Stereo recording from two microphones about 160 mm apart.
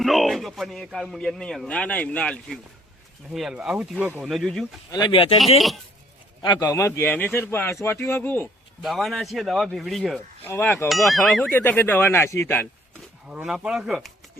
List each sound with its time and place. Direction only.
0.0 s speech: centre (ahead or behind)
4.9 s speech: 30° left (ahead or behind)
5.4 s speech: centre (ahead or behind)
6.4 s a man's voice: 25° left (ahead or behind)
8.8 s speech: centre (ahead or behind)
10.4 s a man's voice: 15° left (ahead or behind)
10.8 s speech: centre (ahead or behind)
11.5 s a man's voice: 10° left (ahead or behind)
13.2 s speech: 5° right (ahead or behind)